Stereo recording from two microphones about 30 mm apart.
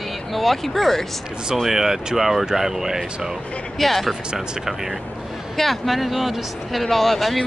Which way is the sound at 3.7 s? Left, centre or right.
Centre.